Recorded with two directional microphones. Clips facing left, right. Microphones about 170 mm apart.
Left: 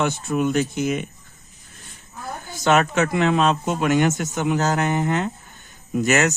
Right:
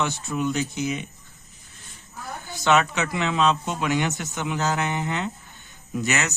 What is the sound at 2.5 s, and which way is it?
Speech, 45° left (ahead or behind).